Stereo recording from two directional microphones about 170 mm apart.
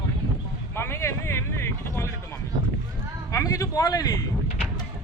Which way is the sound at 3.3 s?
20° left (ahead or behind).